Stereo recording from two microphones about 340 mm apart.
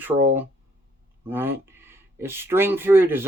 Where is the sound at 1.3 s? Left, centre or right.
Centre.